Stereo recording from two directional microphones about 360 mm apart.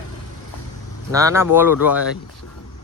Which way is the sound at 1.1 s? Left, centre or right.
Centre.